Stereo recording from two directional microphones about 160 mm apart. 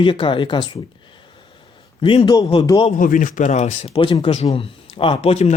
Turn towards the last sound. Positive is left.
turn(degrees=40)  # may be behind; listen again after turning